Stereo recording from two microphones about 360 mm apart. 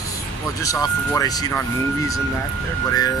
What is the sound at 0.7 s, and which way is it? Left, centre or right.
Speech, centre.